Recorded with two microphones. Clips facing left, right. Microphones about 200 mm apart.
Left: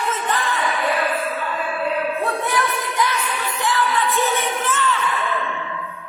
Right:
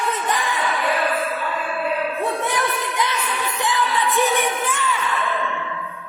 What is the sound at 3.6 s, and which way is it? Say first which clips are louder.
Music: left 1 dB; 15° right (ahead or behind).